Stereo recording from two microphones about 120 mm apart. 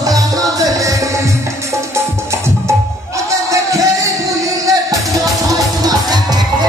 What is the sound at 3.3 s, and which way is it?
Music, 25° right (ahead or behind).